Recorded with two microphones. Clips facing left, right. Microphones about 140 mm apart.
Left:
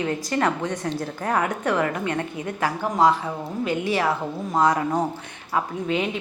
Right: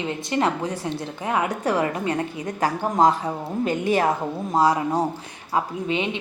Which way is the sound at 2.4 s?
40° right (ahead or behind).